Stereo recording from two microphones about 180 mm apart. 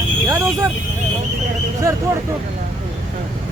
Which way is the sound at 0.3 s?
15° right (ahead or behind).